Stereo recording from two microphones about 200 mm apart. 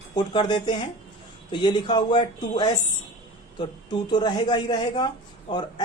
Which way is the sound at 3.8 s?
20° left (ahead or behind).